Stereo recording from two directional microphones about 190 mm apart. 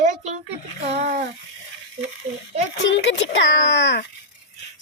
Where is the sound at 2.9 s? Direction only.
70° left (ahead or behind).